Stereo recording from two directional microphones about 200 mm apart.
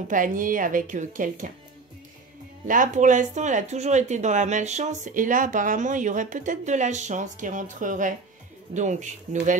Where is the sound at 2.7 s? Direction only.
40° right (ahead or behind).